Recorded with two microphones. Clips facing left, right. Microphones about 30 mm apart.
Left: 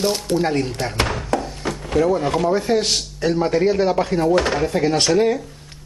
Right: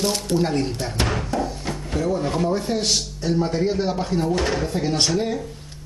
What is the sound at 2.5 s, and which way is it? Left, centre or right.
Speech, left.